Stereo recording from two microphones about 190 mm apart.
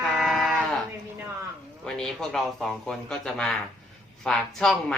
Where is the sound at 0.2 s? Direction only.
Centre (ahead or behind).